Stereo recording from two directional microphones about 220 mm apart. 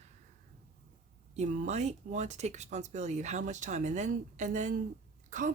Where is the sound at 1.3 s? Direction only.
30° right (ahead or behind).